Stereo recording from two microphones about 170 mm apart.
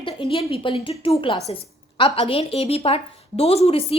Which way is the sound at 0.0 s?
30° left (ahead or behind).